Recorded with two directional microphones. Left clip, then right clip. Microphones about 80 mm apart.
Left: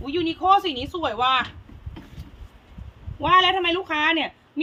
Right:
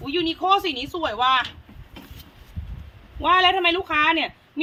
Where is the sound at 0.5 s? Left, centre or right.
Left.